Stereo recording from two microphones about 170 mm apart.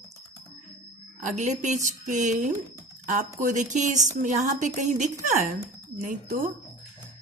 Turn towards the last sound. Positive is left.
turn(degrees=-50)  # may be behind; listen again after turning